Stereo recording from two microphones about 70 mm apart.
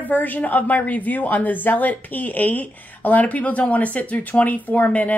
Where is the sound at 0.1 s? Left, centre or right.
Left.